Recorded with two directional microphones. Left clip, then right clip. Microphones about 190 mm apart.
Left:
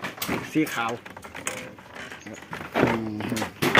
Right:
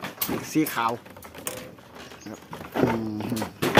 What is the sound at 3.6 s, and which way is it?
Music, 40° left (ahead or behind).